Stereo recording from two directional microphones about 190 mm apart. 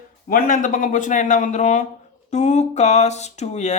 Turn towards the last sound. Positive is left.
turn(degrees=35)  # may be behind; listen again after turning